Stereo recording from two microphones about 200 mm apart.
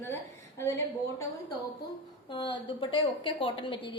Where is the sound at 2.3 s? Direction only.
25° left (ahead or behind).